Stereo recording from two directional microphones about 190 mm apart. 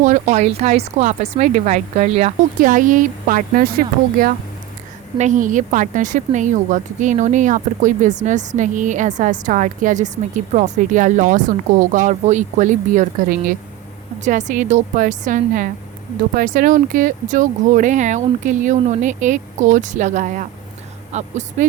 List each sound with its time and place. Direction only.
0.0 s a woman's voice: 40° right (ahead or behind)